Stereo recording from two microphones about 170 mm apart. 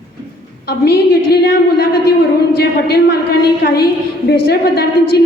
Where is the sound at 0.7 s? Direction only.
70° left (ahead or behind).